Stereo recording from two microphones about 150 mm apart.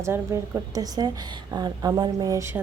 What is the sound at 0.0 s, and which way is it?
A woman's voice, 15° right (ahead or behind).